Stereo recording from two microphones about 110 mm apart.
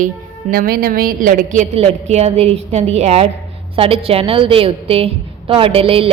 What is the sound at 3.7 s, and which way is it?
A woman's voice, 55° right (ahead or behind).